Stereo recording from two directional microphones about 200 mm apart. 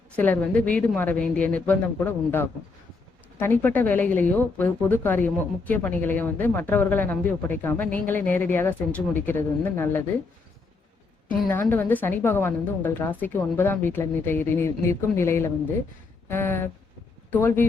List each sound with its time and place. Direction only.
0.2 s a woman's voice: 5° left (ahead or behind)
11.7 s a woman's voice: 10° left (ahead or behind)